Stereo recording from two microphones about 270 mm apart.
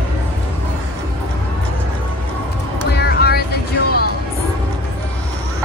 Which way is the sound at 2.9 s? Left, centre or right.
Left.